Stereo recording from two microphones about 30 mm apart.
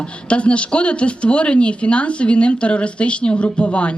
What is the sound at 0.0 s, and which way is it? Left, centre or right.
Speech, left.